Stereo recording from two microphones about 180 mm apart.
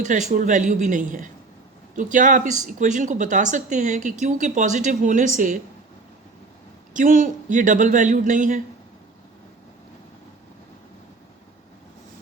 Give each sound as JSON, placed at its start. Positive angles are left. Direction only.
{"t": 0.0, "sound": "speech", "side_deg": -45}
{"t": 6.9, "sound": "speech", "side_deg": -45}